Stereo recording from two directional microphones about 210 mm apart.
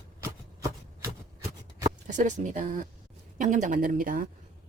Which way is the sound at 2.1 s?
35° right (ahead or behind).